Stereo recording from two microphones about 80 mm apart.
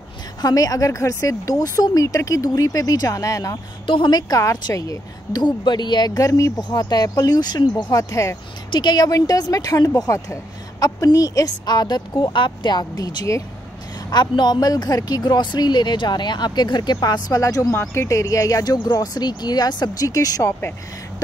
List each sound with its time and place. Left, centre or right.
0.4 s a woman's voice: left
3.8 s a woman's voice: left
4.3 s a woman's voice: left
5.3 s speech: left
6.1 s a woman's voice: left
6.7 s speech: left
8.0 s speech: left
8.7 s a woman's voice: left
14.1 s speech: left